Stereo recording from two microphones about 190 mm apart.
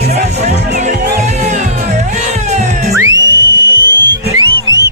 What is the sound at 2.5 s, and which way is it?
Music, 35° right (ahead or behind).